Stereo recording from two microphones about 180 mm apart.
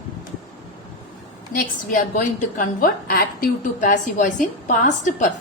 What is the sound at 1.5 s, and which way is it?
A woman's voice, 50° left (ahead or behind).